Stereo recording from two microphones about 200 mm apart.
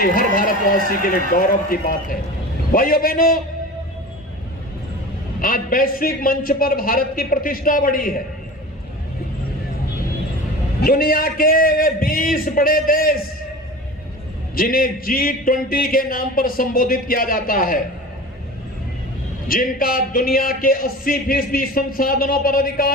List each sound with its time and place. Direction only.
0.0 s speech: 45° left (ahead or behind)
5.4 s speech: 45° left (ahead or behind)
10.8 s speech: 50° left (ahead or behind)
14.5 s speech: 45° left (ahead or behind)
19.5 s speech: 45° left (ahead or behind)